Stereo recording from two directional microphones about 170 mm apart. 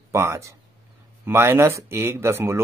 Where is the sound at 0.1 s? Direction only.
15° right (ahead or behind).